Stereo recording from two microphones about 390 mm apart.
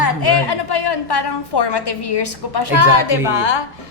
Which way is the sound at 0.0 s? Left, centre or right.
Left.